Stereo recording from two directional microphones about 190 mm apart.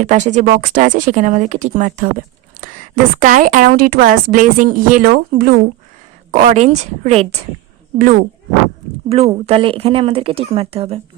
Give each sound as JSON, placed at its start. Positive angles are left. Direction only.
{"t": 0.0, "sound": "a woman's voice", "side_deg": -40}
{"t": 7.9, "sound": "speech", "side_deg": -45}
{"t": 9.0, "sound": "a woman's voice", "side_deg": -30}